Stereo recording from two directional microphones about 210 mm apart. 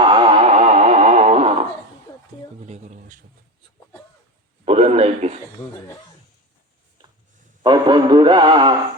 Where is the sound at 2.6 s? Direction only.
35° right (ahead or behind).